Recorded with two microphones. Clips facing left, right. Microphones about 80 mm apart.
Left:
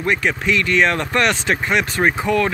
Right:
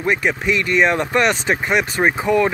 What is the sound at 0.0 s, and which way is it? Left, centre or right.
Speech, centre.